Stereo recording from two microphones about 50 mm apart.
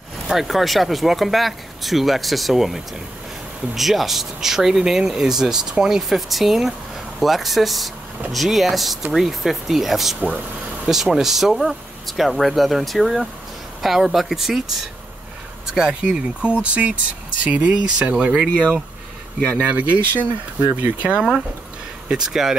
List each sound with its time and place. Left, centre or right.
0.3 s speech: centre
15.6 s speech: centre
19.7 s speech: right
22.0 s speech: centre